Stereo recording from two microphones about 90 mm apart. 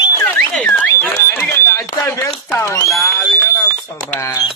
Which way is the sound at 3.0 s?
35° left (ahead or behind).